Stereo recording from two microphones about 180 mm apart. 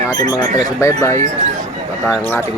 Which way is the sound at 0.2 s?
20° left (ahead or behind).